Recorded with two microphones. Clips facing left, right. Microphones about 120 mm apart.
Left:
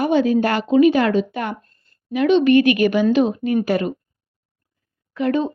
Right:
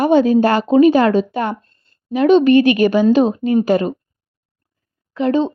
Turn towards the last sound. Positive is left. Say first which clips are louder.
# right 4 dB
turn(degrees=-30)  # may be behind; listen again after turning